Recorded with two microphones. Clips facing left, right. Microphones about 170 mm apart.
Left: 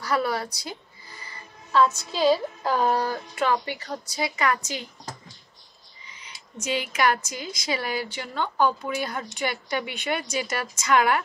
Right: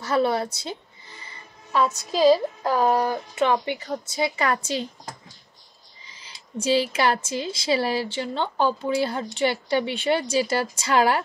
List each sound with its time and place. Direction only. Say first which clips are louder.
0.0 s music: right 4 dB; 25° right (ahead or behind)
2.7 s speech: right 2 dB; 10° right (ahead or behind); by 4.8 s 30° right (ahead or behind)
6.0 s speech: left 1 dB; 30° right (ahead or behind)